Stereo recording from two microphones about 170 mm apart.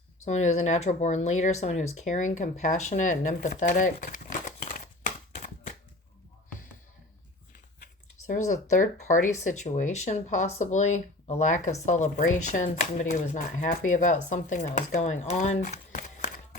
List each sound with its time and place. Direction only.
0.3 s speech: 45° left (ahead or behind)
3.6 s crumpling: 45° left (ahead or behind)
8.7 s speech: 50° left (ahead or behind)